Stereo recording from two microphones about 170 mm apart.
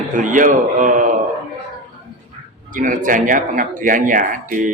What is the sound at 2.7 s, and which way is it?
A man's voice, 50° right (ahead or behind).